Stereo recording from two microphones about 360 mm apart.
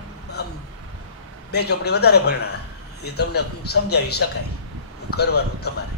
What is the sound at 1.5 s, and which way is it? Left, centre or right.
A man's voice, left.